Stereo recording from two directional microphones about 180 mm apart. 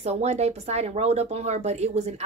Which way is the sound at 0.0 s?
35° right (ahead or behind).